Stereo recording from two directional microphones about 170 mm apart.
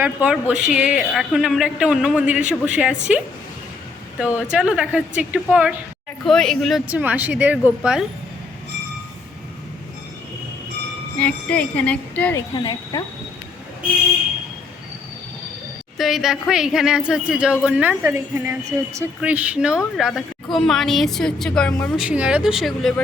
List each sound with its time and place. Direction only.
0.0 s a woman's voice: 10° right (ahead or behind)
4.2 s a woman's voice: 10° right (ahead or behind)
11.2 s speech: 10° left (ahead or behind)
12.4 s speech: 25° left (ahead or behind)
16.0 s a woman's voice: centre (ahead or behind)
22.0 s speech: 5° right (ahead or behind)